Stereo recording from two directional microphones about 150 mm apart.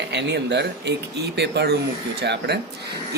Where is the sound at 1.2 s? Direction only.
90° right.